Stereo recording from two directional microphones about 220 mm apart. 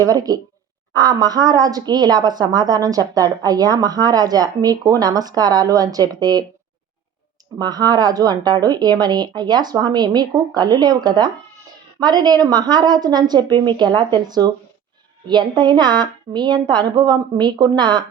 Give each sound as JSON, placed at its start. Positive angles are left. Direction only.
{"t": 0.0, "sound": "a woman's voice", "side_deg": -15}
{"t": 7.6, "sound": "a woman's voice", "side_deg": -20}